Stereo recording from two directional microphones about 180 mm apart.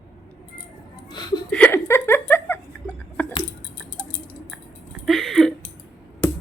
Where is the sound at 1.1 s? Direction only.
25° left (ahead or behind).